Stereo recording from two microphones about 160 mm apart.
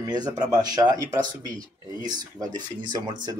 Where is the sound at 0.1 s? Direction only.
25° right (ahead or behind).